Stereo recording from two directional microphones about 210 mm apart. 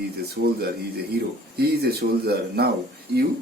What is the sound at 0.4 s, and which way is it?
Speech, 50° right (ahead or behind).